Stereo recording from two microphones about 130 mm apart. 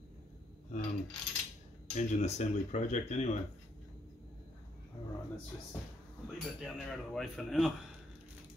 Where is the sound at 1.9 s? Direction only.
65° left (ahead or behind).